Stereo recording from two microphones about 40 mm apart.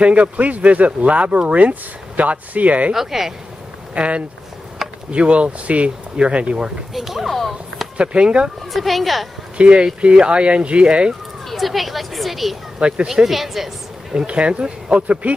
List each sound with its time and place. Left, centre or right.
0.0 s speech: right
2.9 s speech: centre
3.9 s speech: right
4.8 s a sound: centre
5.1 s speech: right
6.9 s speech: centre
8.0 s speech: right
8.7 s speech: centre
9.6 s speech: right
11.5 s speech: centre
14.1 s speech: right
15.0 s speech: right